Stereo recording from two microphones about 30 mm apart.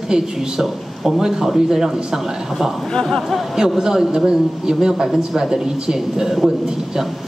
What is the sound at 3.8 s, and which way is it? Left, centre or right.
A woman's voice, right.